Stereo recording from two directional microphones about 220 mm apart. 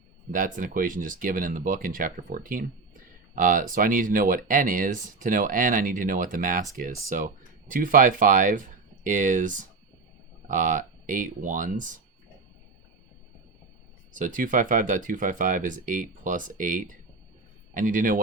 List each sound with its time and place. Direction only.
0.3 s speech: 35° right (ahead or behind)
14.1 s speech: 35° right (ahead or behind)